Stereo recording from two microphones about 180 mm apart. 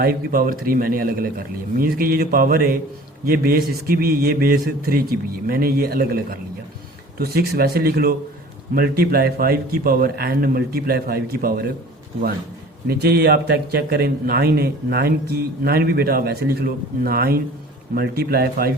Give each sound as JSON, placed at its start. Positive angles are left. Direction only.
{"t": 0.0, "sound": "a man's voice", "side_deg": -55}
{"t": 12.9, "sound": "a man's voice", "side_deg": -60}